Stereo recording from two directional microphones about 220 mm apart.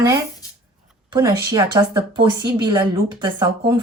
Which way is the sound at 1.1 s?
15° right (ahead or behind).